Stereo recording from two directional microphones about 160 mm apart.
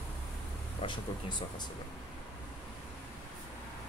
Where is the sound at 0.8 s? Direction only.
30° left (ahead or behind).